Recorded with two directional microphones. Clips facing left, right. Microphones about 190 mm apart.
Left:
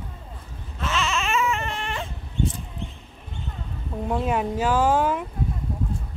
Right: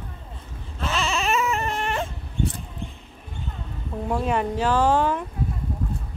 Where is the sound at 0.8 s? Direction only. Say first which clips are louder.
Right 1 dB; 35° right (ahead or behind).